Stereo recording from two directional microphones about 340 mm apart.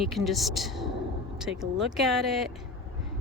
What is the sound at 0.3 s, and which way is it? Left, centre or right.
Speech, centre.